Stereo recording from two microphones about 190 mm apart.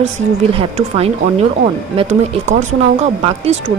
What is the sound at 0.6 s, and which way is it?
Speech, 30° right (ahead or behind).